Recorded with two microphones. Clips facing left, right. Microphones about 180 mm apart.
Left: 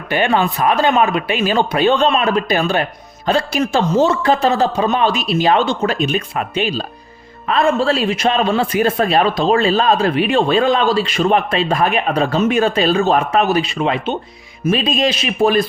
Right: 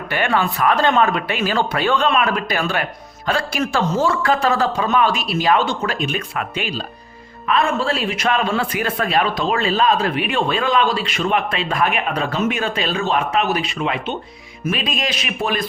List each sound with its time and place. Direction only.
0.1 s speech: 20° left (ahead or behind)